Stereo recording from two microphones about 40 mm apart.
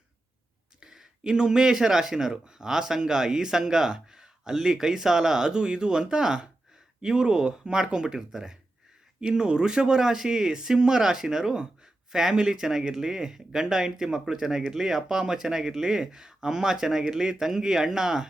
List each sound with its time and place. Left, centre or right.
1.2 s speech: centre